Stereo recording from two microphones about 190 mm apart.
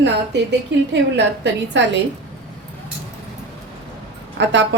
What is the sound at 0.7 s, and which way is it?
A woman's voice, 70° right (ahead or behind).